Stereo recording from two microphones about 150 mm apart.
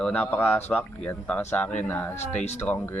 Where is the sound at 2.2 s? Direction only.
50° left (ahead or behind).